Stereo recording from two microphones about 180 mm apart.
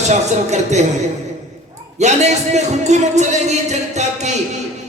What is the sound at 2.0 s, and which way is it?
Speech, 40° right (ahead or behind).